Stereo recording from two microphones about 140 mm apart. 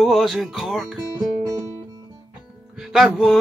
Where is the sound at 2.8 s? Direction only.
5° right (ahead or behind).